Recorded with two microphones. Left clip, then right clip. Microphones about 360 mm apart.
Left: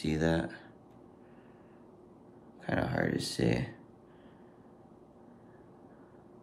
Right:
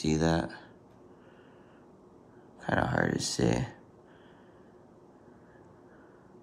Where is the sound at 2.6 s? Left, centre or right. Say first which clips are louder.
Right 4 dB; centre.